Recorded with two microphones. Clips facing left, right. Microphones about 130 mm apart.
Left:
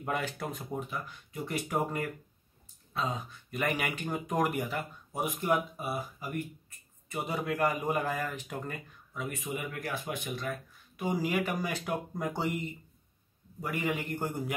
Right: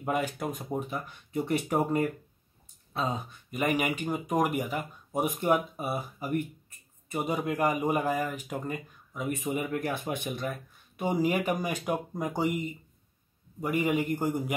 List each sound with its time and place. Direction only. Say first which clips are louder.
0.0 s speech: right 4 dB; 15° right (ahead or behind)
3.4 s speech: right 4 dB; 15° right (ahead or behind)
5.4 s speech: right 2 dB; 25° right (ahead or behind)